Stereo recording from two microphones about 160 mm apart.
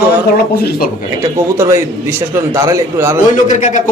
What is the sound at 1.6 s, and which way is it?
A man's voice, 20° right (ahead or behind).